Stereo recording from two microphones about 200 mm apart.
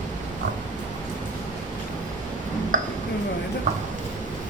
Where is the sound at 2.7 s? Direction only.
40° right (ahead or behind).